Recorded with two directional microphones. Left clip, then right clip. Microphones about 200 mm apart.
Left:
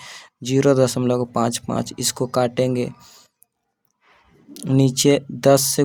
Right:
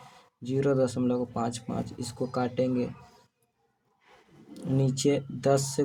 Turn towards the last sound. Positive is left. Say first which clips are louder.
# left 10 dB
turn(degrees=45)  # may be behind; listen again after turning